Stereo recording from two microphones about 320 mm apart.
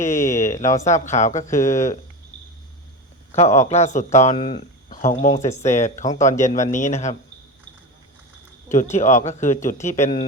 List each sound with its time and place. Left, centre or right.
0.0 s speech: left
1.5 s speech: centre
3.3 s speech: left
8.7 s speech: left